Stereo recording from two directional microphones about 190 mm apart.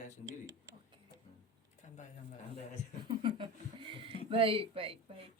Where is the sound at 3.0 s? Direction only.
25° right (ahead or behind).